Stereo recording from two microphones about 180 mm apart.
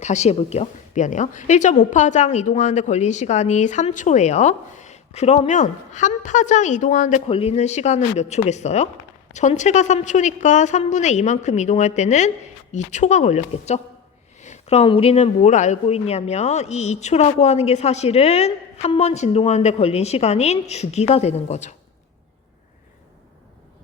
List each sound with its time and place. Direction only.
0.0 s speech: 40° left (ahead or behind)